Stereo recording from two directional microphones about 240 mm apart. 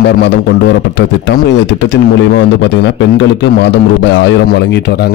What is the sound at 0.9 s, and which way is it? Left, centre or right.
A man's voice, left.